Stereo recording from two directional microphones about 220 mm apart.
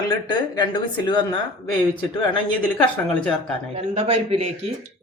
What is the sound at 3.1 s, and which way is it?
Speech, 5° left (ahead or behind).